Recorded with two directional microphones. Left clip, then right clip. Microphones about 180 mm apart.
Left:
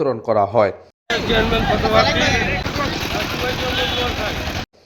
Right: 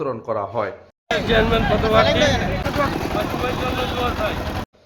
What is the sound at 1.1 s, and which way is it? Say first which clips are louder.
Speech: even; 20° right (ahead or behind).